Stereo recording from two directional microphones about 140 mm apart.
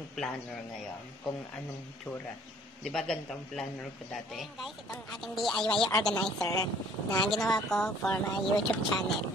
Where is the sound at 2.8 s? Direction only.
5° left (ahead or behind).